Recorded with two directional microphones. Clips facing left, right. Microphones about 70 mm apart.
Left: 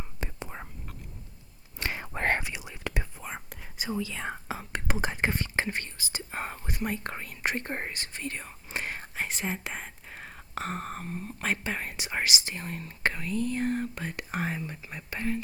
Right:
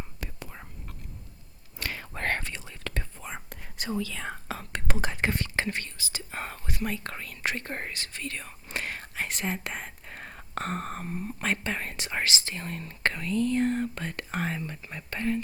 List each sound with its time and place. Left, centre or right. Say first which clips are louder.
0.2 s whispering: left 3 dB; left
1.8 s whispering: left 2 dB; left
3.2 s whispering: even; centre
4.1 s whispering: left 1 dB; centre
5.7 s speech: even; left
6.7 s speech: right 1 dB; left
8.7 s whispering: even; left
9.1 s speech: right 1 dB; centre
9.7 s whispering: right 1 dB; centre
11.4 s speech: even; centre